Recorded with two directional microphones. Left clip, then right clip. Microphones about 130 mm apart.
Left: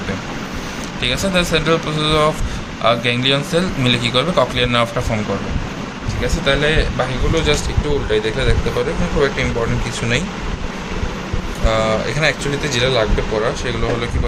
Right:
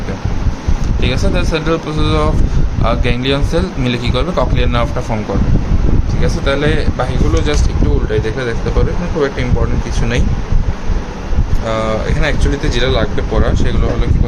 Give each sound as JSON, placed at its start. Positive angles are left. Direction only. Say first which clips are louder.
{"t": 1.0, "sound": "speech", "louder": "left 1 dB", "side_deg": -10}
{"t": 6.2, "sound": "speech", "louder": "even", "side_deg": -20}
{"t": 8.1, "sound": "speech", "louder": "left 1 dB", "side_deg": -20}
{"t": 11.6, "sound": "speech", "louder": "even", "side_deg": -15}